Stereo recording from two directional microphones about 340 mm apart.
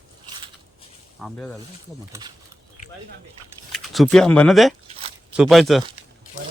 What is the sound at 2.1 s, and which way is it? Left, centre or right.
Speech, centre.